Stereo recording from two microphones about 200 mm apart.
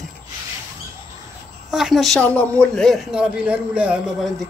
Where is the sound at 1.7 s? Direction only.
Centre (ahead or behind).